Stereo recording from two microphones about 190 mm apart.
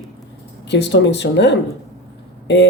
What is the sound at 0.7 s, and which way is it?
Speech, 65° left (ahead or behind).